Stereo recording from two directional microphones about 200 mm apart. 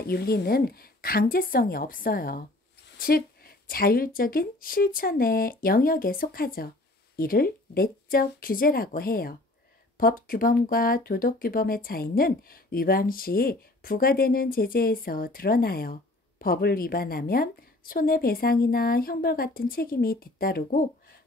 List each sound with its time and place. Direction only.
0.0 s speech: 50° left (ahead or behind)